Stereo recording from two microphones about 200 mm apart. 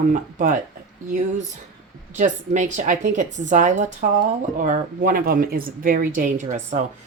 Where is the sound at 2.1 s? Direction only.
35° right (ahead or behind).